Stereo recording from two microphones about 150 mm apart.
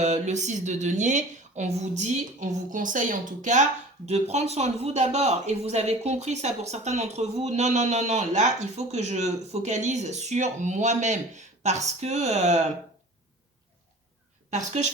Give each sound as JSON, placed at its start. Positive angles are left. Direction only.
{"t": 0.0, "sound": "a woman's voice", "side_deg": -50}
{"t": 14.5, "sound": "a woman's voice", "side_deg": -50}